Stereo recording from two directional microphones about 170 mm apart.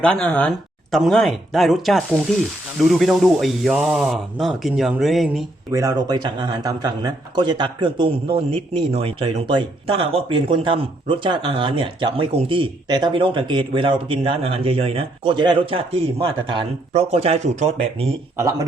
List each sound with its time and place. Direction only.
0.0 s speech: 5° left (ahead or behind)
5.7 s a man's voice: 20° right (ahead or behind); by 18.1 s 40° right (ahead or behind)